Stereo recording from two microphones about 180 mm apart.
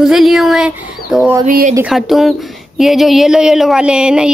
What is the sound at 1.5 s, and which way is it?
Speech, 50° right (ahead or behind).